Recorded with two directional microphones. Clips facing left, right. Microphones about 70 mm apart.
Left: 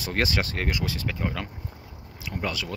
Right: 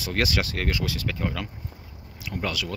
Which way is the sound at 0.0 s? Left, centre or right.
Left.